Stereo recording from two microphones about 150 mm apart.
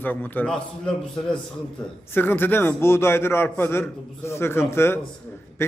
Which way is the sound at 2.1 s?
15° left (ahead or behind).